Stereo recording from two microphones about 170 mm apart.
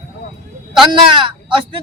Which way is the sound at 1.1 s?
30° right (ahead or behind).